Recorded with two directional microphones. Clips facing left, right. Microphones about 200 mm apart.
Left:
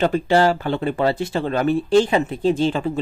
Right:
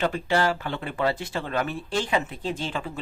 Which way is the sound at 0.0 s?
30° left (ahead or behind).